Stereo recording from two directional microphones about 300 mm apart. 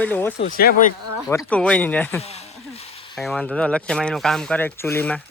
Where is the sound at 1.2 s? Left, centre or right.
Centre.